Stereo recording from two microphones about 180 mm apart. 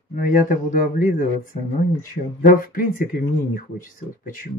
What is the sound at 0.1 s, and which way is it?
Speech, 50° left (ahead or behind).